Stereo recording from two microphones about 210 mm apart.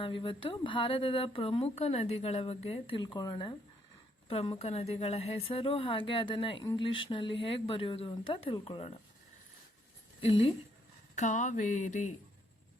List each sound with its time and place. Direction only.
0.0 s speech: 25° left (ahead or behind)
10.2 s a woman's voice: 25° left (ahead or behind)
11.1 s a sound: 35° left (ahead or behind)